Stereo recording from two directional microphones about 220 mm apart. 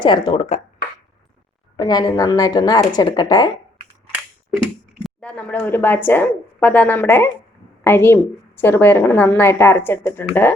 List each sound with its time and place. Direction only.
0.0 s speech: 20° left (ahead or behind)
1.7 s a woman's voice: 20° left (ahead or behind)
5.0 s a woman's voice: 5° left (ahead or behind)